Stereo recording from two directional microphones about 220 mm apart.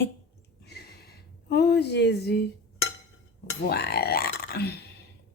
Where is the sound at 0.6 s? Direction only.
45° left (ahead or behind).